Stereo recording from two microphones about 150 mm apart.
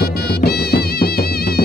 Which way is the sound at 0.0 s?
90° left.